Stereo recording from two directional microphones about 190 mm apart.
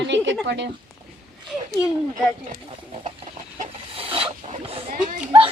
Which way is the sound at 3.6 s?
30° right (ahead or behind).